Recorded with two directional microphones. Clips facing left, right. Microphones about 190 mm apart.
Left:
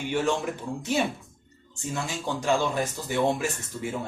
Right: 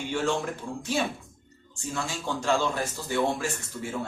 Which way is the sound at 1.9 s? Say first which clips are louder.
Left 1 dB; 20° left (ahead or behind).